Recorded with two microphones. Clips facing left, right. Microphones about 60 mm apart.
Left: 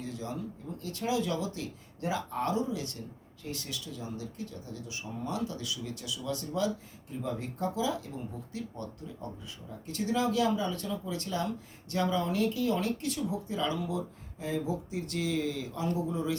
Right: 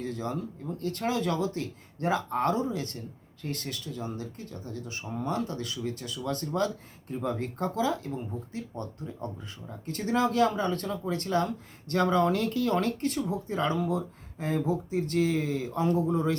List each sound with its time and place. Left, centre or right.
0.0 s speech: right